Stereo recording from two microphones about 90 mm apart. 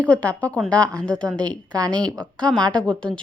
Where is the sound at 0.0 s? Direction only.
15° left (ahead or behind).